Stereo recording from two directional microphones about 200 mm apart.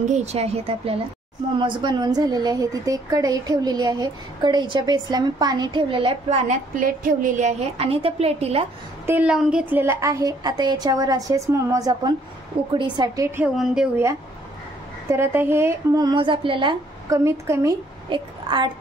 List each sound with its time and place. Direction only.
0.1 s a woman's voice: 30° right (ahead or behind)
9.0 s a woman's voice: 10° right (ahead or behind)
13.6 s a woman's voice: 5° right (ahead or behind)
15.0 s a woman's voice: 15° right (ahead or behind)